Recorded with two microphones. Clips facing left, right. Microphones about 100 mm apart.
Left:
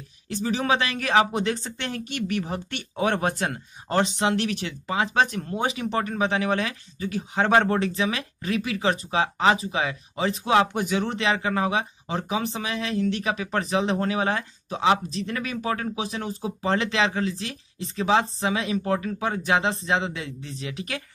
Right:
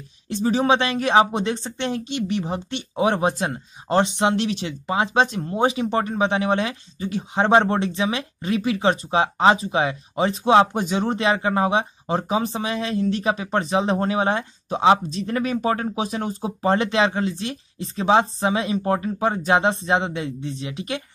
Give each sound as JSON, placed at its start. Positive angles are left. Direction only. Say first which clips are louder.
{"t": 0.3, "sound": "speech", "louder": "right 5 dB", "side_deg": -30}